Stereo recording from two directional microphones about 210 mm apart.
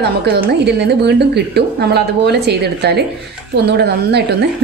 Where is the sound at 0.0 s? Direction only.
50° right (ahead or behind).